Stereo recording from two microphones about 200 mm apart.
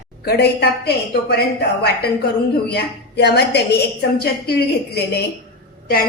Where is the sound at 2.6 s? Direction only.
55° left (ahead or behind).